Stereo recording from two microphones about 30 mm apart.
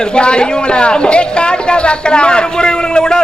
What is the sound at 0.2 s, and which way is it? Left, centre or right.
A man's voice, left.